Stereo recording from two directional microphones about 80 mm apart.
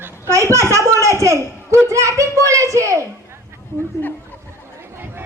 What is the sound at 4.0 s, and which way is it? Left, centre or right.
Speech, left.